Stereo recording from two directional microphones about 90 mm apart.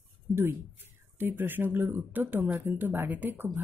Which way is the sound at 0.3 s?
25° right (ahead or behind).